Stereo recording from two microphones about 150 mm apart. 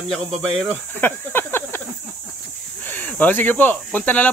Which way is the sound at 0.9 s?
15° left (ahead or behind).